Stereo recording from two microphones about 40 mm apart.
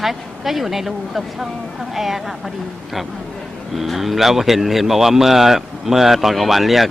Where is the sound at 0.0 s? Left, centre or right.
Centre.